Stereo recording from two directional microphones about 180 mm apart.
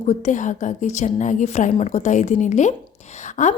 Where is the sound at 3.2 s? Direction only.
40° left (ahead or behind).